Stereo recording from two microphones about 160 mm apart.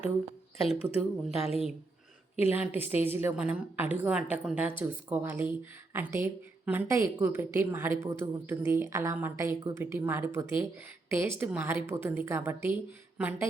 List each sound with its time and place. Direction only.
0.7 s speech: 40° left (ahead or behind)
2.4 s speech: 15° right (ahead or behind)